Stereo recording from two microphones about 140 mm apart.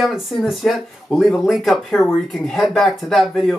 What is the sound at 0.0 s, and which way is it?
Speech, centre (ahead or behind).